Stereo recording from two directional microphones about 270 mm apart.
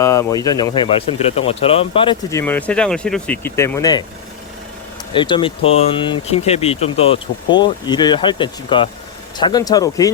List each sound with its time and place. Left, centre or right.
0.0 s a sound: centre
0.4 s speech: centre
2.4 s speech: centre
5.1 s speech: centre